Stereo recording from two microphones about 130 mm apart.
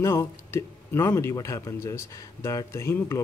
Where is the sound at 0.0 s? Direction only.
25° left (ahead or behind).